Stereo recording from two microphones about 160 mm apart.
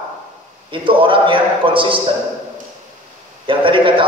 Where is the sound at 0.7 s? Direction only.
30° right (ahead or behind).